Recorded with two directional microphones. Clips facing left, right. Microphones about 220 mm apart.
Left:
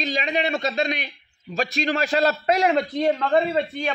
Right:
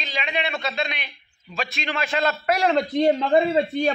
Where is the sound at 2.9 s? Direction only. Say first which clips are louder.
Right 2 dB; 20° right (ahead or behind).